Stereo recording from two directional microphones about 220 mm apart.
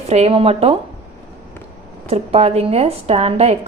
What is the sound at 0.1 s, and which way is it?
Speech, 30° right (ahead or behind).